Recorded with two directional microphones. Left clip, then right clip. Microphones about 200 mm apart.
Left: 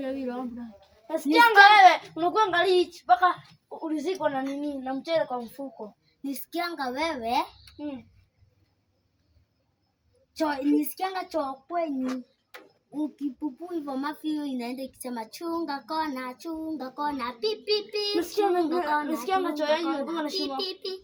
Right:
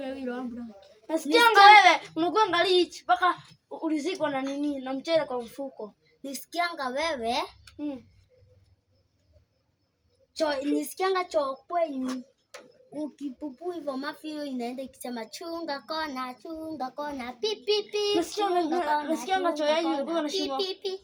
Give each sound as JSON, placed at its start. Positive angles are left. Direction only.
{"t": 0.0, "sound": "a sound", "side_deg": -10}
{"t": 1.0, "sound": "a woman's voice", "side_deg": -15}
{"t": 10.3, "sound": "a woman's voice", "side_deg": -10}
{"t": 13.8, "sound": "a woman's voice", "side_deg": -10}